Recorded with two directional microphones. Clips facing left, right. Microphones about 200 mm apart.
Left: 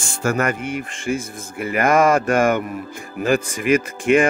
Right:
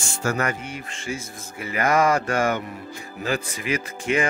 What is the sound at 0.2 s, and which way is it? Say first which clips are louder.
Speech: left 5 dB; 50° left (ahead or behind).